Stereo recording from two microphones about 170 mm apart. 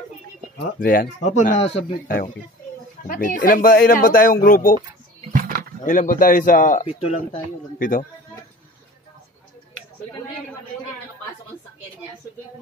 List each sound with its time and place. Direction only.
0.7 s a man's voice: 55° left (ahead or behind); by 2.0 s 35° left (ahead or behind)
2.0 s speech: 55° left (ahead or behind)
5.3 s a sound: 55° right (ahead or behind)
5.9 s a man's voice: 50° left (ahead or behind)